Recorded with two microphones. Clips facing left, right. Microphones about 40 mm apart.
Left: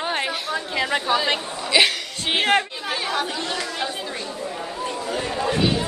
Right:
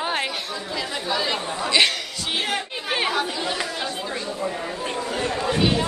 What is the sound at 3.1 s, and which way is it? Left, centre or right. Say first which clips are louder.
Speech: even; centre.